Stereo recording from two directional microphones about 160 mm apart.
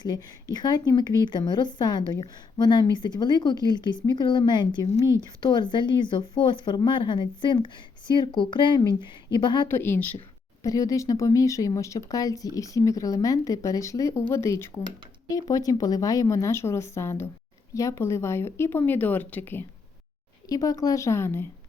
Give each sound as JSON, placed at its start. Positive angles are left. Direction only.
{"t": 0.5, "sound": "speech", "side_deg": 25}
{"t": 9.6, "sound": "speech", "side_deg": 15}
{"t": 20.5, "sound": "speech", "side_deg": 25}